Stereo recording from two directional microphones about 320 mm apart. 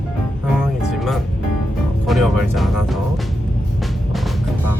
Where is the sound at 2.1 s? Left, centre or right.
Centre.